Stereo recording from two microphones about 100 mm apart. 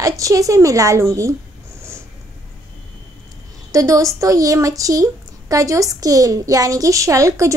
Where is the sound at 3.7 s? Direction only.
35° right (ahead or behind).